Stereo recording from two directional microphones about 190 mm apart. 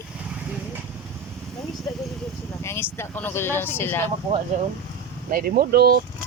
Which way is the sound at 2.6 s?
15° left (ahead or behind).